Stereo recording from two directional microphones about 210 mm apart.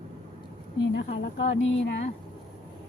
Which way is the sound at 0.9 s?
55° left (ahead or behind).